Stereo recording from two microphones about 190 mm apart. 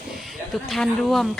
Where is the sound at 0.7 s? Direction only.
Centre (ahead or behind).